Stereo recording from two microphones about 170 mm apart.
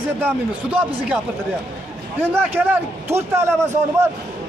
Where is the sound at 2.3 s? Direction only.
10° right (ahead or behind).